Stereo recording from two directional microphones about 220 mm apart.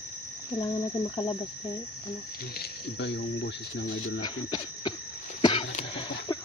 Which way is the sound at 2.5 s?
50° left (ahead or behind).